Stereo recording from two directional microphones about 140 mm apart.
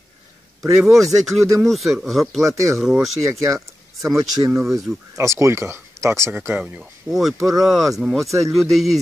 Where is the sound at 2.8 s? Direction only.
Centre (ahead or behind).